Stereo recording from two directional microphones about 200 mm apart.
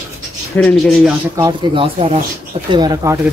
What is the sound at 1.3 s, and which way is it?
Speech, 20° right (ahead or behind).